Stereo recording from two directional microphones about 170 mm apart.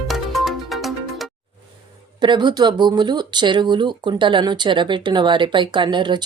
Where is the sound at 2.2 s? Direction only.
25° right (ahead or behind).